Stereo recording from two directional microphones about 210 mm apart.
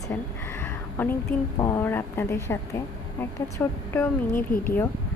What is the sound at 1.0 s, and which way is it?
A woman's voice, 10° left (ahead or behind).